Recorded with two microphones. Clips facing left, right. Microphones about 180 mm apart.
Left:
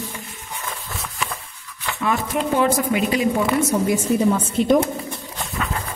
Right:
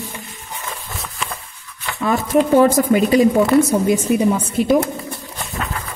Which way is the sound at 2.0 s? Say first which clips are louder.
Right 6 dB; 40° right (ahead or behind).